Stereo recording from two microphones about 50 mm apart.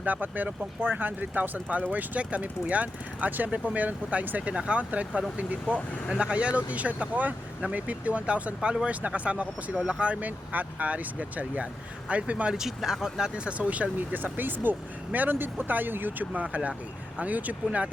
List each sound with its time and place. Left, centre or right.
0.0 s speech: right
12.5 s speech: centre
13.3 s speech: right
16.3 s speech: right